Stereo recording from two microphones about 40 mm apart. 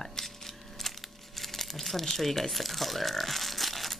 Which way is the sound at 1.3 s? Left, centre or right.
Centre.